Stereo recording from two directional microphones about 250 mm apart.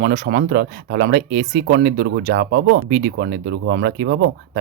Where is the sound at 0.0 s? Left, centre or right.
Right.